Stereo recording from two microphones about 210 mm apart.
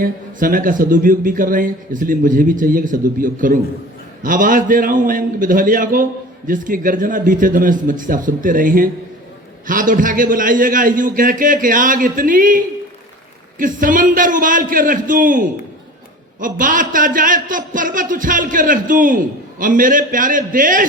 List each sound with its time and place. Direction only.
0.0 s a man's voice: 40° right (ahead or behind)